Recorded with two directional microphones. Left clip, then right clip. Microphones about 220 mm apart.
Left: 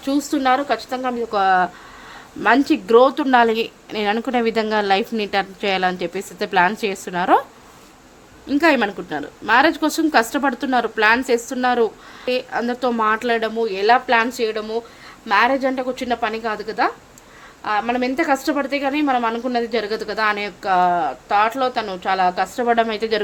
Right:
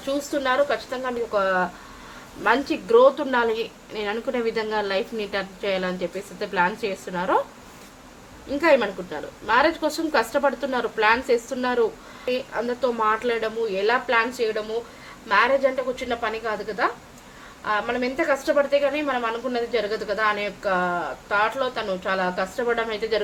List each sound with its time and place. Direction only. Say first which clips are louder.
0.0 s a woman's voice: left 5 dB; 50° left (ahead or behind)
8.6 s a woman's voice: left 2 dB; 45° left (ahead or behind)